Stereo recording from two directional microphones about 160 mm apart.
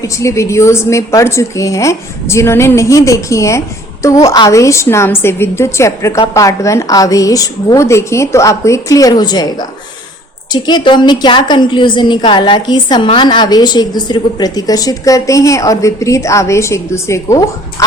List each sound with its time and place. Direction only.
0.2 s a woman's voice: 20° left (ahead or behind)